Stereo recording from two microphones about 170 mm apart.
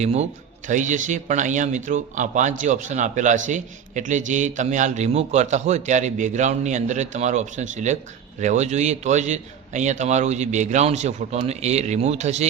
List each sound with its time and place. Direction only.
0.0 s a man's voice: 40° right (ahead or behind)